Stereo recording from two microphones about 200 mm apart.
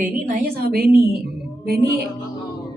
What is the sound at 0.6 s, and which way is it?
Speech, 50° right (ahead or behind).